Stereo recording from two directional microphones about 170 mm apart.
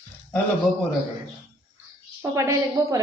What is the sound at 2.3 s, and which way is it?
Speech, 20° right (ahead or behind).